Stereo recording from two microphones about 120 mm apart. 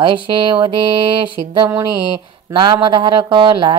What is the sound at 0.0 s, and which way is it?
Speech, 45° right (ahead or behind).